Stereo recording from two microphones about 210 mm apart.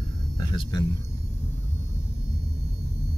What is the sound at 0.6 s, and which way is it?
Speech, 20° left (ahead or behind).